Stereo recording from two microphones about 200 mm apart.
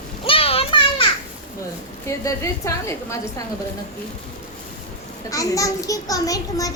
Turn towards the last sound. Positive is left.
turn(degrees=15)  # may be behind; listen again after turning